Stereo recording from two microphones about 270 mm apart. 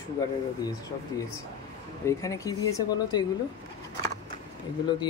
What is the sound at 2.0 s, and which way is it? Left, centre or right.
Speech, centre.